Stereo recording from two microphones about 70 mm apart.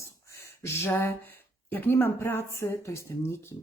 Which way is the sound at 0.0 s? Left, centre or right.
Left.